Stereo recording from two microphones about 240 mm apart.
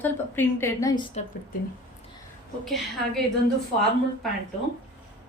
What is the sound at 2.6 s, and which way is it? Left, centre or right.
Speech, centre.